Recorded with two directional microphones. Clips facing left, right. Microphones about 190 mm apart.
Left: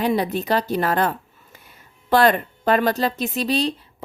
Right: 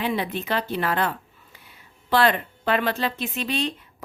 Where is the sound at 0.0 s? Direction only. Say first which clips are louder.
Left 5 dB; 40° left (ahead or behind).